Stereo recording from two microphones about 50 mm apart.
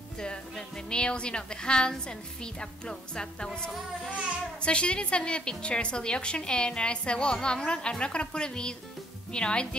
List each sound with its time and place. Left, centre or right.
0.2 s a woman's voice: centre
4.6 s a woman's voice: left